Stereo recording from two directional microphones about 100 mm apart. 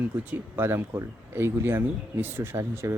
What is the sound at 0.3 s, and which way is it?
Speech, 20° right (ahead or behind).